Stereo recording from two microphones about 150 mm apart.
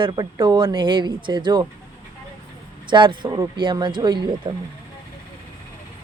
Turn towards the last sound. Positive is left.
turn(degrees=-30)  # may be behind; listen again after turning